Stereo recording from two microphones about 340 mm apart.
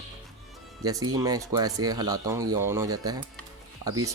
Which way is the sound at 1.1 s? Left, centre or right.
Centre.